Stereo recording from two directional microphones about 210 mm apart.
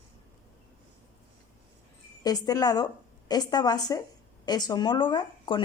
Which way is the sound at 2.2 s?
15° left (ahead or behind).